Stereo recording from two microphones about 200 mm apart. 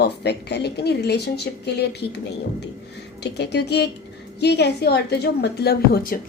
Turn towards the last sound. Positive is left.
turn(degrees=50)  # may be behind; listen again after turning